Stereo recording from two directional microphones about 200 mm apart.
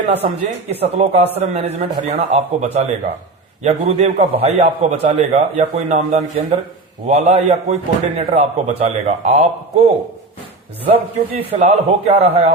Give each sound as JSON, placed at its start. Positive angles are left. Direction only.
{"t": 0.1, "sound": "speech", "side_deg": -30}
{"t": 10.8, "sound": "speech", "side_deg": -25}